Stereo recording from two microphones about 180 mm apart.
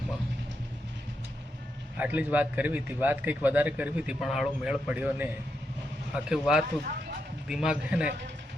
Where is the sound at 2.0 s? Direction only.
10° right (ahead or behind).